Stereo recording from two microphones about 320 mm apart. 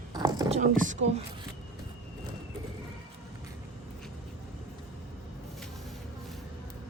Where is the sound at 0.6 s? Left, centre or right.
Right.